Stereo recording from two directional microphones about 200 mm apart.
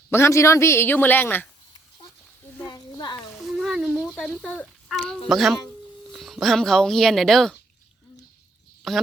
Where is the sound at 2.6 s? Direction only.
20° left (ahead or behind).